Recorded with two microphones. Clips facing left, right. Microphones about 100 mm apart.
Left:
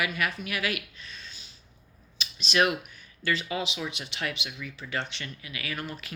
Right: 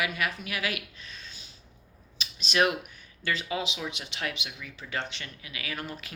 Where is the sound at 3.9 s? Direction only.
35° right (ahead or behind).